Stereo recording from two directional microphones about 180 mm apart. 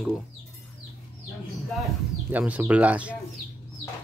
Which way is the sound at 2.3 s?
10° right (ahead or behind).